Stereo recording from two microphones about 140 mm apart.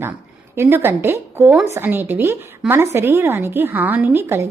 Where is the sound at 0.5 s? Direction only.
15° right (ahead or behind).